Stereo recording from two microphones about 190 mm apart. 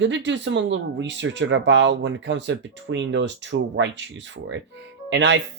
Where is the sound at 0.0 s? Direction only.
75° right (ahead or behind).